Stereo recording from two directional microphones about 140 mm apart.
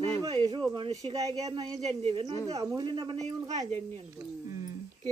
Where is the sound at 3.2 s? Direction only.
55° right (ahead or behind).